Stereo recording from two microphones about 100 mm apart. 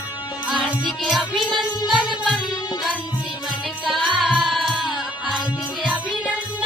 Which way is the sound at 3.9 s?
Centre (ahead or behind).